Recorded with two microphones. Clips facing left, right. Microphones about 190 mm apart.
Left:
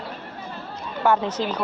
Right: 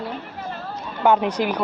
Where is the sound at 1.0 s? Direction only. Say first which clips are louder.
Right 3 dB; 15° right (ahead or behind).